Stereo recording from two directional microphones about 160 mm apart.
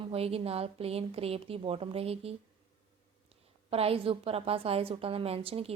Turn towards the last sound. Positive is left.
turn(degrees=-40)  # may be behind; listen again after turning